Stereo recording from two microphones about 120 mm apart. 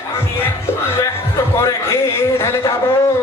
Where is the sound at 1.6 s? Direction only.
20° left (ahead or behind).